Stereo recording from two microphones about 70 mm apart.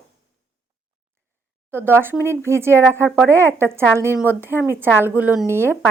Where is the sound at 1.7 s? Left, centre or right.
Right.